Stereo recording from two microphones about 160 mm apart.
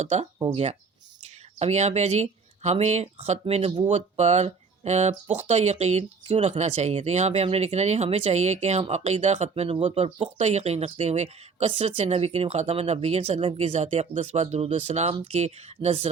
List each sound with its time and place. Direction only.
0.0 s speech: 45° right (ahead or behind)